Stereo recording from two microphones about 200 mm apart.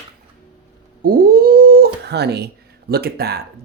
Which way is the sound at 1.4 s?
50° right (ahead or behind).